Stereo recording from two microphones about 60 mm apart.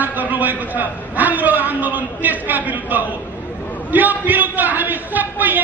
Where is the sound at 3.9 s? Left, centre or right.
Right.